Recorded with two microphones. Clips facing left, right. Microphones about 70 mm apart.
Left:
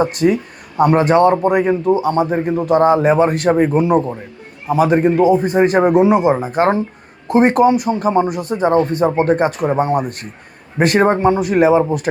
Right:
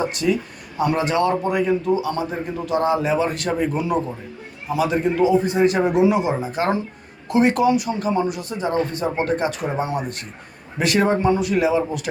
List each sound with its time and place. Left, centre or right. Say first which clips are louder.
0.0 s a man's voice: left 6 dB; left